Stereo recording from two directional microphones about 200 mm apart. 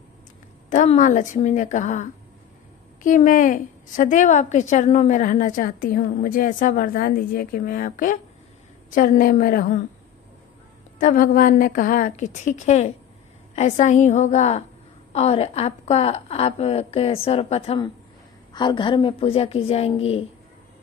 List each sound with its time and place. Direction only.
0.7 s a woman's voice: 40° left (ahead or behind)
11.0 s a woman's voice: 40° left (ahead or behind)